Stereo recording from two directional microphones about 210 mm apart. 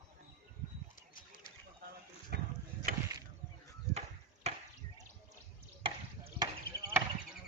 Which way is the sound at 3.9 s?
30° right (ahead or behind).